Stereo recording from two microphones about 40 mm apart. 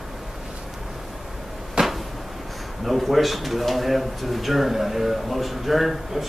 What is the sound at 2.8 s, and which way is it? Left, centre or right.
A man's voice, centre.